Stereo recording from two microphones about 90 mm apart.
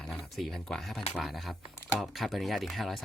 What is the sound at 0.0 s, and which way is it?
Speech, centre (ahead or behind).